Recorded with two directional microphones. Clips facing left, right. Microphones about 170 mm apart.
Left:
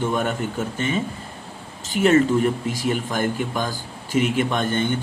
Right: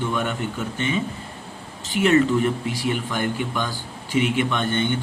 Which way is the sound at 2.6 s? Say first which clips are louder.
Left 1 dB; 40° left (ahead or behind).